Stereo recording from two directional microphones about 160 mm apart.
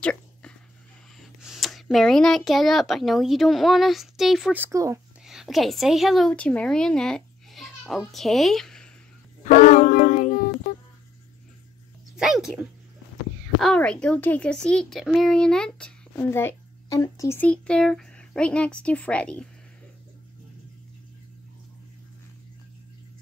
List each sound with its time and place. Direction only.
0.0 s dog: 5° left (ahead or behind)
1.2 s speech: centre (ahead or behind)
4.6 s speech: 20° right (ahead or behind)
5.2 s a woman's voice: centre (ahead or behind)
9.4 s a sound: 55° left (ahead or behind)
12.2 s dog: centre (ahead or behind)
13.6 s a child's voice: 5° left (ahead or behind)